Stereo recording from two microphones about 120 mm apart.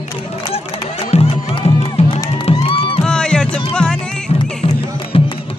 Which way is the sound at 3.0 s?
5° left (ahead or behind).